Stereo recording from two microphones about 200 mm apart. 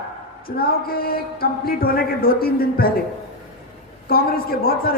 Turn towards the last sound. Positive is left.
turn(degrees=50)  # may be behind; listen again after turning